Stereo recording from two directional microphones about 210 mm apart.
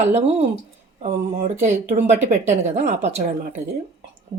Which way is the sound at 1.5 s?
35° right (ahead or behind).